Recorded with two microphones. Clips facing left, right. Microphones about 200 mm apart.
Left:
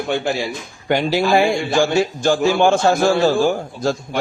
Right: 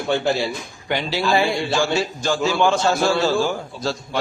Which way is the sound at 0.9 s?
50° left (ahead or behind).